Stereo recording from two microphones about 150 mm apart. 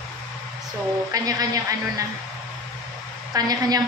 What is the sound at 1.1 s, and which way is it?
Speech, 25° right (ahead or behind).